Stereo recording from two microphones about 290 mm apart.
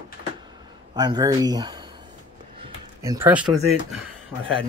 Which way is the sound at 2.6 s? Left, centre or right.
Centre.